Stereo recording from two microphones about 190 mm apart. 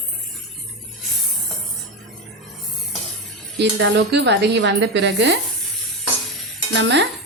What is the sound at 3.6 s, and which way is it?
Speech, 65° right (ahead or behind).